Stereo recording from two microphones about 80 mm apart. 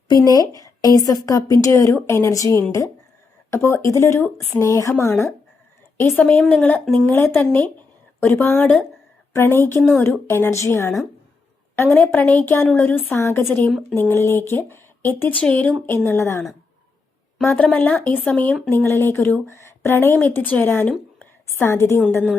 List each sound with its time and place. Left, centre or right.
0.1 s a woman's voice: left
4.6 s speech: left
6.1 s speech: centre
15.4 s speech: centre
16.0 s speech: left
17.4 s speech: left
21.2 s a sound: left